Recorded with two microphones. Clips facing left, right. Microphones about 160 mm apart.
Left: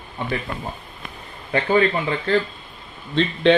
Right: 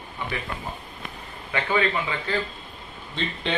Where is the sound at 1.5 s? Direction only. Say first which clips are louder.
Left 6 dB; 35° left (ahead or behind).